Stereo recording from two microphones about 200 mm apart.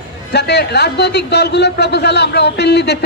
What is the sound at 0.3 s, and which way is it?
A man's voice, 55° left (ahead or behind).